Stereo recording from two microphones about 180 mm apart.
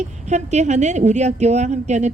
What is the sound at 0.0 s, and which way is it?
A woman's voice, 40° right (ahead or behind).